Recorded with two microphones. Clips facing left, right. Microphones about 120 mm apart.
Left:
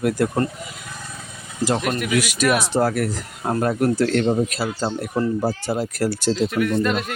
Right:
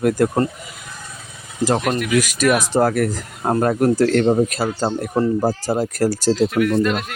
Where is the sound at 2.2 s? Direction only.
40° right (ahead or behind).